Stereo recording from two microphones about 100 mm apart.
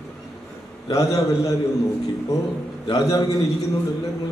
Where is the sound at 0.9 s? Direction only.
35° left (ahead or behind).